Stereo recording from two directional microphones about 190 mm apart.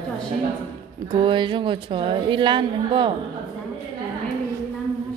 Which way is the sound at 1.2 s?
25° right (ahead or behind).